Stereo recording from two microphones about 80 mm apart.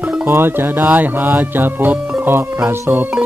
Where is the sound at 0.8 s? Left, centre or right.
Right.